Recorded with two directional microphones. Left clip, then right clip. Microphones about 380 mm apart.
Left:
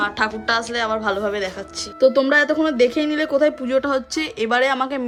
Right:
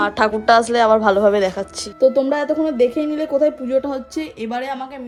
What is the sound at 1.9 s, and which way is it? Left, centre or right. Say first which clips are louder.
Speech: left 1 dB; centre.